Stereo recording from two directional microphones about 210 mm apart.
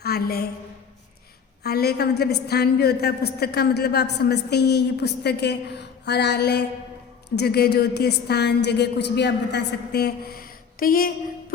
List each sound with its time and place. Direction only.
0.0 s a woman's voice: 50° left (ahead or behind)
1.6 s a woman's voice: 50° left (ahead or behind)